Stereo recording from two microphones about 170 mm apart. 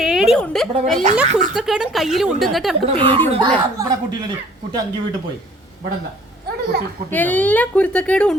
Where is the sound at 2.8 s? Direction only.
35° right (ahead or behind).